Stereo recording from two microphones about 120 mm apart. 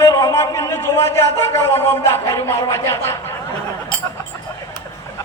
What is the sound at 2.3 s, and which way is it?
Speech, 20° left (ahead or behind).